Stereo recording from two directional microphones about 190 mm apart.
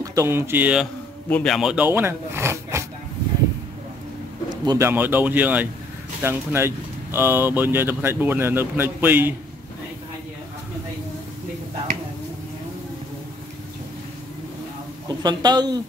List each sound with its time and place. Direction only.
0.0 s speech: 15° right (ahead or behind)
1.3 s speech: centre (ahead or behind); by 2.8 s 15° right (ahead or behind)
4.6 s speech: 15° right (ahead or behind)
15.0 s speech: 20° right (ahead or behind)